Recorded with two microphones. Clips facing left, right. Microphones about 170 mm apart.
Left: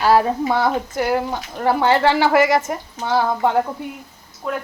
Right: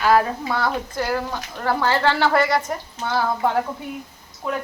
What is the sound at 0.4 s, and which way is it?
Speech, 20° left (ahead or behind).